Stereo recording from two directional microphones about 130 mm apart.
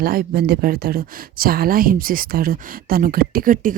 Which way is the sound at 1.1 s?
90° right.